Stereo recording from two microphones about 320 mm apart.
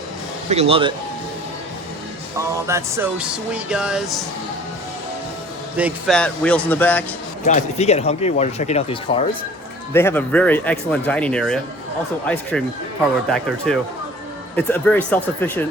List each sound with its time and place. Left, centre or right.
0.5 s speech: centre
2.4 s music: centre
5.7 s music: centre
7.4 s speech: left
9.9 s music: centre
13.7 s music: centre